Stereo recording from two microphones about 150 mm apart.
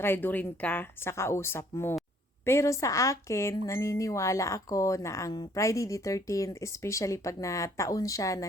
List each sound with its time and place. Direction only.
0.0 s speech: 15° left (ahead or behind)